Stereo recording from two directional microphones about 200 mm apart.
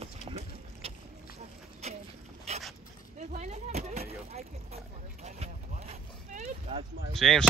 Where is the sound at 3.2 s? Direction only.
35° right (ahead or behind).